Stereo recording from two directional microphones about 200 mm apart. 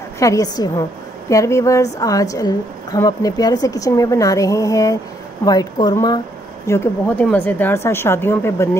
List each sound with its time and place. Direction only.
0.2 s a woman's voice: 15° left (ahead or behind)
6.7 s a woman's voice: 10° left (ahead or behind)